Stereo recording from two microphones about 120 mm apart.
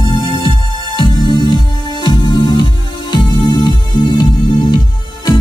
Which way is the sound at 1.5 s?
40° left (ahead or behind).